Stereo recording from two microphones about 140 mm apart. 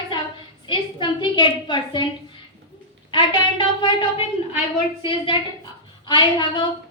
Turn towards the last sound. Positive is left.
turn(degrees=35)  # may be behind; listen again after turning